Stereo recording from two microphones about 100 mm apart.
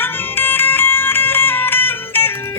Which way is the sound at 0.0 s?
20° left (ahead or behind).